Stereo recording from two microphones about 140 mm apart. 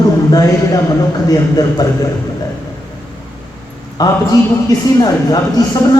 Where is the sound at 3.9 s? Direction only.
25° left (ahead or behind).